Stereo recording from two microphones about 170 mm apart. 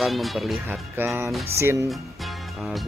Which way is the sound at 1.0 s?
10° right (ahead or behind).